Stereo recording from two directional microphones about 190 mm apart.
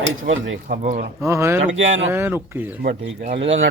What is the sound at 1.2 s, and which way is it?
Speech, 15° right (ahead or behind).